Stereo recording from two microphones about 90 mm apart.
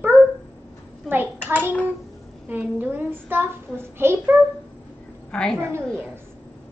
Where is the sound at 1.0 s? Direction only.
20° right (ahead or behind).